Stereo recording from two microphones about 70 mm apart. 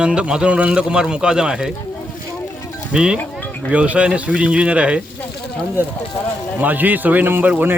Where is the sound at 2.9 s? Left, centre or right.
Centre.